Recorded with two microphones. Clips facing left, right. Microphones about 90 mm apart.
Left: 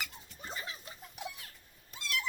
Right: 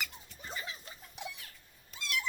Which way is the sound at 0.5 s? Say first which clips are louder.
Right 1 dB; 30° left (ahead or behind).